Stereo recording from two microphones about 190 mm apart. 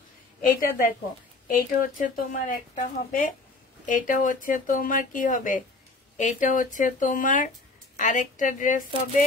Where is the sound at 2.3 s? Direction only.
45° left (ahead or behind).